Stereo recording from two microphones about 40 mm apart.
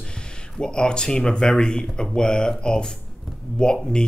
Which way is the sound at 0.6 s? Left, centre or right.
Left.